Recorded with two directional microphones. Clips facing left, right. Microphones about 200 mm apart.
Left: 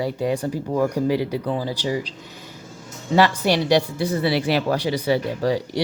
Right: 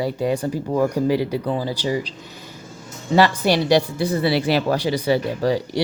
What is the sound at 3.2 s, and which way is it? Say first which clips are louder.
Speech: right 1 dB; 35° right (ahead or behind).